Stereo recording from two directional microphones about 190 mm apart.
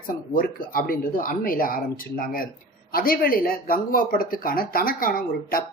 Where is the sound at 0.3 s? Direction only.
50° left (ahead or behind).